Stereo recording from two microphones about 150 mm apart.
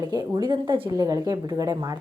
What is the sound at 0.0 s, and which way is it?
A woman's voice, 25° right (ahead or behind).